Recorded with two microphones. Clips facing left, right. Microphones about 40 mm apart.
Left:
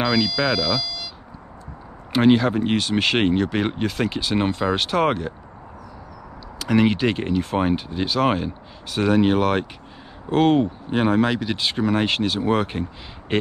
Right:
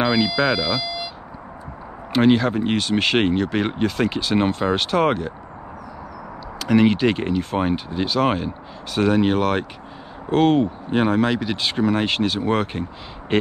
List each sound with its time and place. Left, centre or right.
0.0 s a sound: centre
0.4 s speech: centre
0.8 s vehicle: centre
2.1 s speech: centre
6.6 s speech: centre